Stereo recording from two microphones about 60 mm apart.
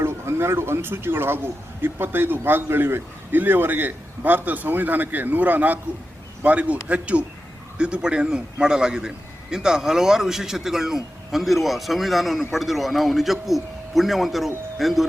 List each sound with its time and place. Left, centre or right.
0.0 s a man's voice: right; by 15.0 s centre